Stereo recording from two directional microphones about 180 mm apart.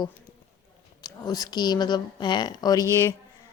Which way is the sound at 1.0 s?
20° left (ahead or behind).